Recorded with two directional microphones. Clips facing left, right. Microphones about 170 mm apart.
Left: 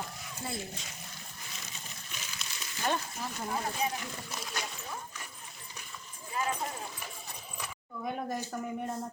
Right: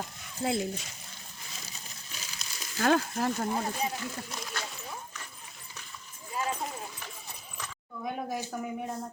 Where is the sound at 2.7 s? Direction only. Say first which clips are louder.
Right 8 dB; 90° right.